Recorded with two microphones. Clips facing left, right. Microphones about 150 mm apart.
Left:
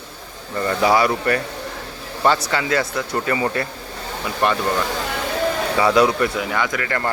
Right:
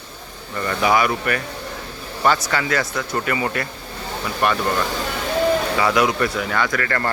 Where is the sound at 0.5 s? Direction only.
30° left (ahead or behind).